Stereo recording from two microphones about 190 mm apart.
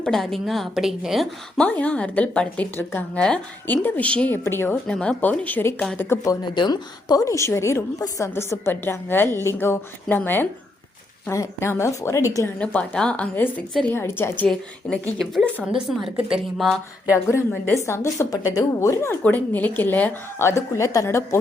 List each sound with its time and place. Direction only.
0.0 s a woman's voice: centre (ahead or behind)
6.5 s a woman's voice: 25° left (ahead or behind)
12.5 s a woman's voice: 5° left (ahead or behind)
17.3 s a woman's voice: 10° left (ahead or behind)